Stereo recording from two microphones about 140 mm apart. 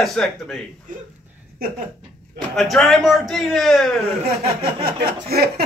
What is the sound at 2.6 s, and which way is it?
A man's voice, centre (ahead or behind).